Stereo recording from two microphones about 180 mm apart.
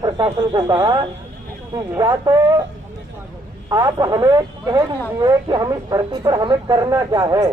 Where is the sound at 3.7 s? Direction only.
20° right (ahead or behind).